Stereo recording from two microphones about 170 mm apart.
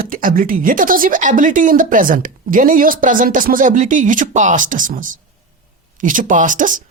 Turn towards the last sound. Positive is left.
turn(degrees=-50)  # may be behind; listen again after turning